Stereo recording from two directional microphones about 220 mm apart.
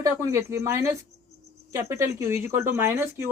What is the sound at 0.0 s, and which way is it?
Speech, 15° right (ahead or behind).